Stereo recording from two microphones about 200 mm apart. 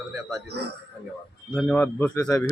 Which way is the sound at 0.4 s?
55° right (ahead or behind).